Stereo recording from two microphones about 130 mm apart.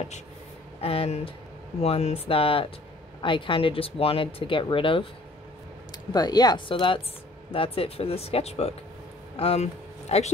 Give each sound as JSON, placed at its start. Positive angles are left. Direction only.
{"t": 0.7, "sound": "speech", "side_deg": 50}
{"t": 6.1, "sound": "speech", "side_deg": 30}